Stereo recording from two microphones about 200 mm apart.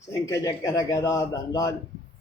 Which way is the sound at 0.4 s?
15° left (ahead or behind).